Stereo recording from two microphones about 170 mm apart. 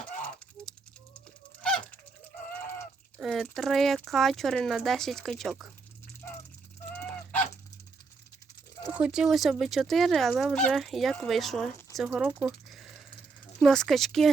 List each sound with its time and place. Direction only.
0.6 s a sound: 5° left (ahead or behind)
3.2 s speech: centre (ahead or behind)
6.9 s goose: 10° left (ahead or behind)
8.9 s speech: 10° right (ahead or behind)